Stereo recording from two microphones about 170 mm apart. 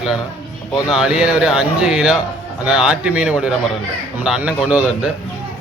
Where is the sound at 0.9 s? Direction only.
5° right (ahead or behind).